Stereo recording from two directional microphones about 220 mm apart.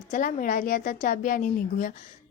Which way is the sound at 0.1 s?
35° left (ahead or behind).